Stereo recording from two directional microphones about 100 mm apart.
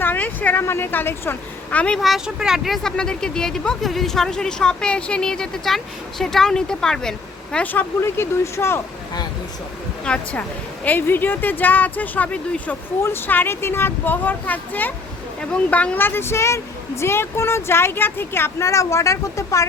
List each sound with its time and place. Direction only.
0.0 s speech: 20° left (ahead or behind)
2.0 s speech: centre (ahead or behind); by 8.8 s 25° left (ahead or behind)
10.0 s speech: 10° left (ahead or behind); by 19.6 s 35° left (ahead or behind)